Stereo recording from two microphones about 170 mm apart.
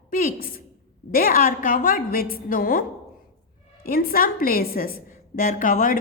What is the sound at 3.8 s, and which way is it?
A woman's voice, 60° left (ahead or behind).